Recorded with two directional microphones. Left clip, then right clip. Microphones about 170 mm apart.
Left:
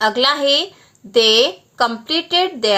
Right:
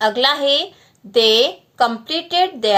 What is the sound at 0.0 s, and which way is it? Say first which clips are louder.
A woman's voice: left 1 dB; 25° left (ahead or behind).